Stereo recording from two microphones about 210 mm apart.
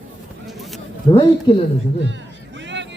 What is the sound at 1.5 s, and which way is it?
Speech, 25° left (ahead or behind).